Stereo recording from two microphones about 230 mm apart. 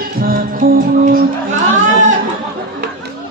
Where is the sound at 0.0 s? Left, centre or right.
Right.